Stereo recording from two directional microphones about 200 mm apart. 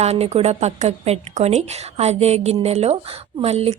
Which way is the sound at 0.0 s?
30° right (ahead or behind).